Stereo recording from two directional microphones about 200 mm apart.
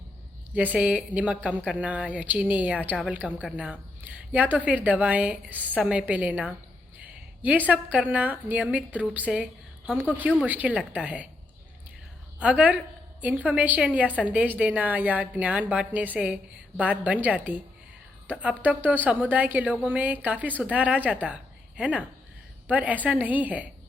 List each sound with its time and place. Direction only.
0.5 s a woman's voice: 5° right (ahead or behind)
7.0 s a sound: 10° right (ahead or behind)
7.7 s a woman's voice: 5° right (ahead or behind)
12.4 s a woman's voice: 5° right (ahead or behind)